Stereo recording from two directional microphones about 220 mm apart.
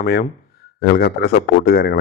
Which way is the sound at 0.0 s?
45° left (ahead or behind).